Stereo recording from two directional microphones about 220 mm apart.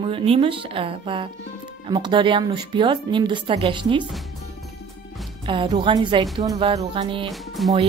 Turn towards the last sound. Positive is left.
turn(degrees=0)  # may be behind; listen again after turning